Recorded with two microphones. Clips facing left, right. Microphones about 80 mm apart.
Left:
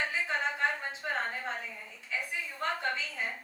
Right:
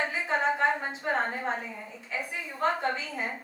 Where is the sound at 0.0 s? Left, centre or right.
Right.